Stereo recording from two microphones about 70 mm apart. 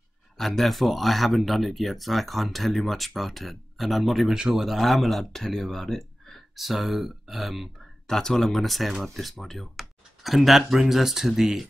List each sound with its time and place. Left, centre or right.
0.4 s speech: centre
4.4 s a man's voice: centre
4.6 s speech: centre